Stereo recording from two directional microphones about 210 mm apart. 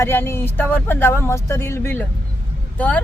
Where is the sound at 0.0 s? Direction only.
10° left (ahead or behind).